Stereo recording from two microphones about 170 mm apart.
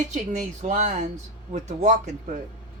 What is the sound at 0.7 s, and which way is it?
Speech, 45° right (ahead or behind).